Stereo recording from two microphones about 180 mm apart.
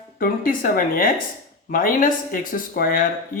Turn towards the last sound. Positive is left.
turn(degrees=55)  # may be behind; listen again after turning